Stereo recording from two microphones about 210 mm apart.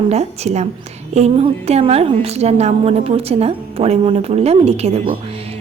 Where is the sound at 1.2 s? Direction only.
30° right (ahead or behind).